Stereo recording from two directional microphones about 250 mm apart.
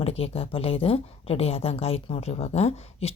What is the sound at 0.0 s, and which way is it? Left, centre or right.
A woman's voice, left.